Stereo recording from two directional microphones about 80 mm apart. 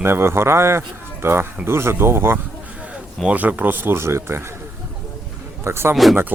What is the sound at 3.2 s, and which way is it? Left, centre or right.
Speech, centre.